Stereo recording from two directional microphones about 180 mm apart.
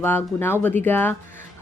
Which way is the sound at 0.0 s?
10° left (ahead or behind).